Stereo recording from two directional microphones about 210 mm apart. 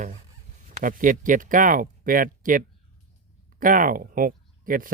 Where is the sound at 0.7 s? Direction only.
40° right (ahead or behind).